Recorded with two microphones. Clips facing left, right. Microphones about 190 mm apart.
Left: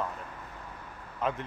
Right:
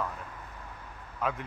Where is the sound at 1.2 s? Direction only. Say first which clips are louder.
Left 1 dB; 5° right (ahead or behind).